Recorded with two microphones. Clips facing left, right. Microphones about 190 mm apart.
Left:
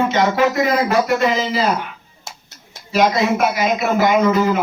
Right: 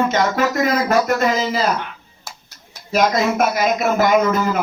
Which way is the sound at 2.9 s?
45° right (ahead or behind).